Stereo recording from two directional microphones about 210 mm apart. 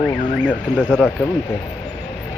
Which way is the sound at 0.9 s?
5° left (ahead or behind).